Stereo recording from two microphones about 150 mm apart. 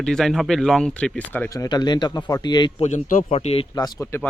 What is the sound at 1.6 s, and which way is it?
Speech, 30° left (ahead or behind).